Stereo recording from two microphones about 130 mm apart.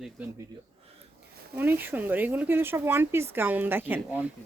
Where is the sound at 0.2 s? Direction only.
10° right (ahead or behind).